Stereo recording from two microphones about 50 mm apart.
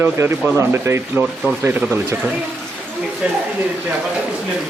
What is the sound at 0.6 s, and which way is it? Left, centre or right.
Speech, right.